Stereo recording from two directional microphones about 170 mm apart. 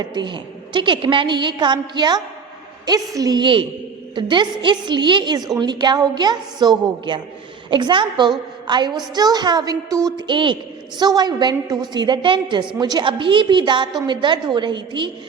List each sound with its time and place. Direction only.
0.0 s a woman's voice: 25° right (ahead or behind)